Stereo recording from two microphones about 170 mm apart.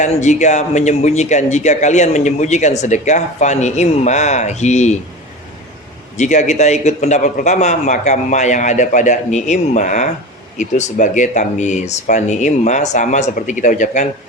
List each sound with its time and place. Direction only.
0.0 s a man's voice: 45° left (ahead or behind)
6.1 s a man's voice: 45° left (ahead or behind)